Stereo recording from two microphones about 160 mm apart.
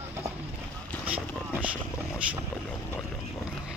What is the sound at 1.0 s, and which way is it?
Vehicle, 10° right (ahead or behind).